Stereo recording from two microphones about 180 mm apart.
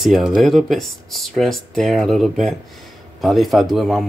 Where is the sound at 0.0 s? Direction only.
Centre (ahead or behind).